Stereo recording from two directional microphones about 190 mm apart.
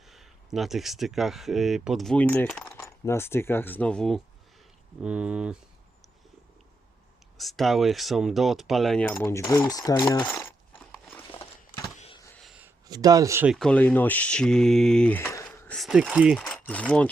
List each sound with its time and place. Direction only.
0.1 s speech: centre (ahead or behind)
7.3 s speech: centre (ahead or behind)
9.0 s speech: 15° left (ahead or behind)
11.9 s a sound: 30° left (ahead or behind)
12.4 s a sound: 5° right (ahead or behind)
12.9 s speech: 20° right (ahead or behind)
13.5 s speech: 5° left (ahead or behind)
16.4 s speech: 10° left (ahead or behind)